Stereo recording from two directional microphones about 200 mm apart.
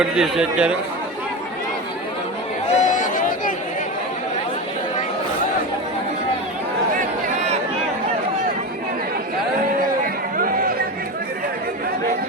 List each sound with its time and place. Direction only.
0.0 s a man's voice: 5° right (ahead or behind)
2.7 s a sound: 40° left (ahead or behind)
10.3 s chatter: 45° right (ahead or behind)